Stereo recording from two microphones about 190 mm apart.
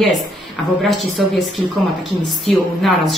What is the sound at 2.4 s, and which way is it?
Speech, centre (ahead or behind).